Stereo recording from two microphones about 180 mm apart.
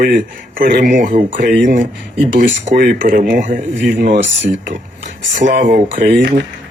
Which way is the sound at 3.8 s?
65° right (ahead or behind).